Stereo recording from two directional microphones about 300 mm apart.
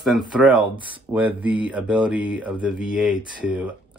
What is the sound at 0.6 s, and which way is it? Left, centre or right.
Speech, centre.